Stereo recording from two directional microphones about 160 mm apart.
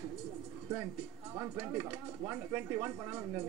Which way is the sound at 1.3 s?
15° right (ahead or behind).